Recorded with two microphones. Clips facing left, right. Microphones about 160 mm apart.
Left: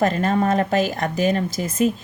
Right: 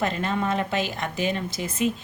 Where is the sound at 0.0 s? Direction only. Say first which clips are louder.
Left 6 dB; 40° left (ahead or behind).